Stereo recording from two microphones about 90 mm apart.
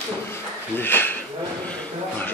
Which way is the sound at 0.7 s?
25° left (ahead or behind).